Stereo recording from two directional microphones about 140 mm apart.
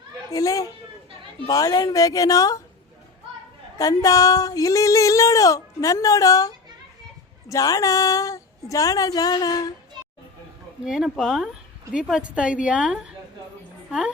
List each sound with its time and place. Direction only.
0.3 s speech: 25° left (ahead or behind)
3.8 s speech: 25° left (ahead or behind)
10.8 s a woman's voice: 5° right (ahead or behind)